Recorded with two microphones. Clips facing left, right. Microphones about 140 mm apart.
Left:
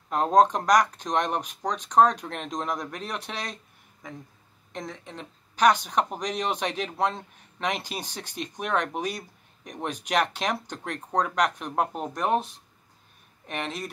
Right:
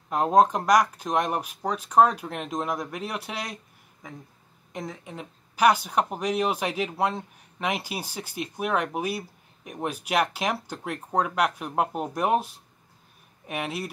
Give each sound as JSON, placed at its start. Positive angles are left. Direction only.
{"t": 0.1, "sound": "speech", "side_deg": -5}
{"t": 4.7, "sound": "speech", "side_deg": -5}